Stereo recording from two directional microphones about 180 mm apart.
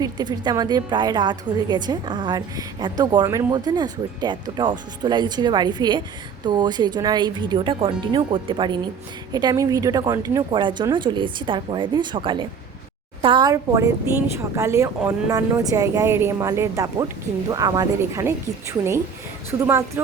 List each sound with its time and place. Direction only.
0.0 s a woman's voice: 25° right (ahead or behind)
19.5 s speech: 15° right (ahead or behind)